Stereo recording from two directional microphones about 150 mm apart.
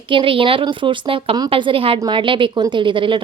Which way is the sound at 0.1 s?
35° right (ahead or behind).